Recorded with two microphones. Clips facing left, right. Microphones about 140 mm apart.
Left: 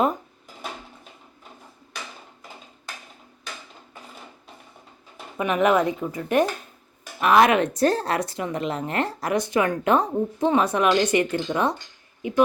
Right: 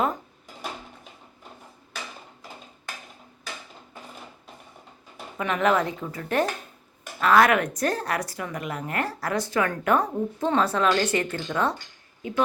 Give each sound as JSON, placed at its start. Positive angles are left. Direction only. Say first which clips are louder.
{"t": 5.4, "sound": "a woman's voice", "louder": "left 3 dB", "side_deg": 15}